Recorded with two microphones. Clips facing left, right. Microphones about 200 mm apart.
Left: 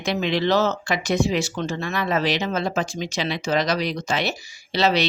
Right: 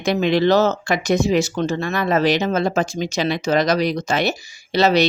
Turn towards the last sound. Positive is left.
turn(degrees=-45)  # may be behind; listen again after turning